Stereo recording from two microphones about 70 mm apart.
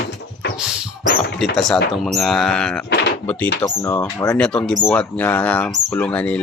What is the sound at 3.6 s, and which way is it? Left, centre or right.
Speech, left.